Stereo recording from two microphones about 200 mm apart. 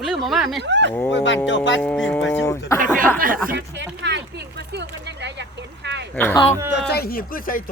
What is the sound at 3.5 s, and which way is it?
Speech, 60° right (ahead or behind).